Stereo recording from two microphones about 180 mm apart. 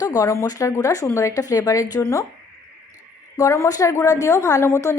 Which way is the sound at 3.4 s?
15° left (ahead or behind).